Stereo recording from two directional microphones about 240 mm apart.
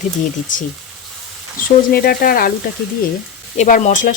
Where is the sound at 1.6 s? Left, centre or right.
Left.